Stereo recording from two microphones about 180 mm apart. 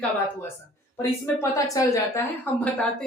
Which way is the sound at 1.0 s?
20° left (ahead or behind).